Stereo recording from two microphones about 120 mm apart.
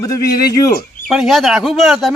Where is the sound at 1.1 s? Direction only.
Centre (ahead or behind).